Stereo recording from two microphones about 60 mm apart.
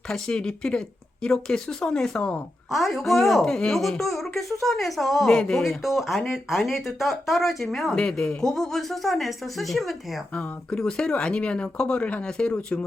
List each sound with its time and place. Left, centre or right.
0.1 s speech: centre
2.0 s speech: centre
3.4 s speech: centre
7.9 s speech: centre
10.3 s speech: centre